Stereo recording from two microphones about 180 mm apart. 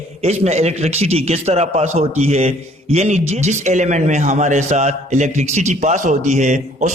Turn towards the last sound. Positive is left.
turn(degrees=-40)  # may be behind; listen again after turning